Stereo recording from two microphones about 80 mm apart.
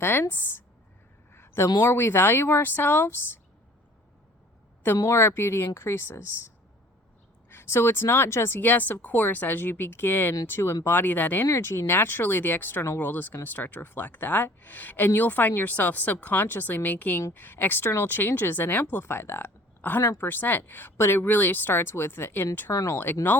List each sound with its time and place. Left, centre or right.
0.0 s speech: left
1.3 s a sound: left
1.8 s speech: left
4.9 s speech: left
7.5 s speech: left
10.8 s speech: left
11.4 s speech: left
22.7 s speech: left